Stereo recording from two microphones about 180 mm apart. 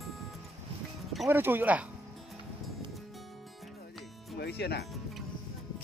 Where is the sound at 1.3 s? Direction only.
10° right (ahead or behind).